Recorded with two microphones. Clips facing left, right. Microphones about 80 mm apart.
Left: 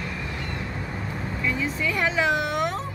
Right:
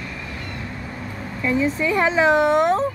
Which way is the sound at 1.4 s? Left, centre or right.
Right.